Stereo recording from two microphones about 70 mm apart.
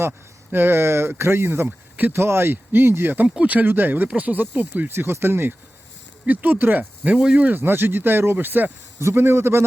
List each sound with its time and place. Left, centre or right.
0.5 s speech: right
3.2 s speech: centre; by 9.6 s right